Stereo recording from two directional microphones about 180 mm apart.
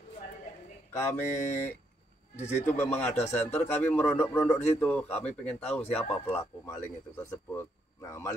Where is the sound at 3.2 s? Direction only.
40° left (ahead or behind).